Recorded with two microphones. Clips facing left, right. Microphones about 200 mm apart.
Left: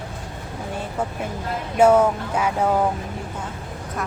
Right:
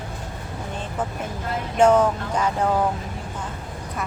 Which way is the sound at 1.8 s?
10° left (ahead or behind).